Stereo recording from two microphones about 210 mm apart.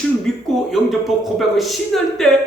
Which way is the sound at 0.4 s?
Centre (ahead or behind).